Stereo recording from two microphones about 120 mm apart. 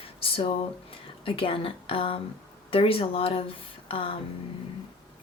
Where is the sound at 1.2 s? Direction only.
50° left (ahead or behind).